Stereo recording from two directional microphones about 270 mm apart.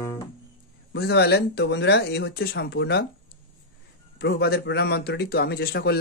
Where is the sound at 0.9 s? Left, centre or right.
Left.